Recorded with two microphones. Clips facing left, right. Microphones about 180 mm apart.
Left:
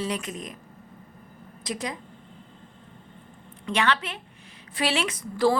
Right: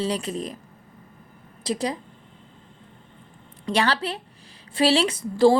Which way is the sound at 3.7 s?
35° right (ahead or behind).